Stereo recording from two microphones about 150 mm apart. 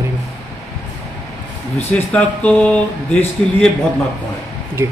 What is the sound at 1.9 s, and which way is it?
Speech, 10° left (ahead or behind).